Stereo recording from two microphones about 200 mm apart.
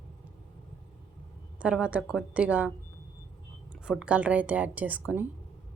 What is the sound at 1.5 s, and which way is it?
A woman's voice, 5° right (ahead or behind).